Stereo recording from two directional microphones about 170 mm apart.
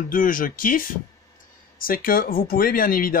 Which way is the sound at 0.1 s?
55° left (ahead or behind).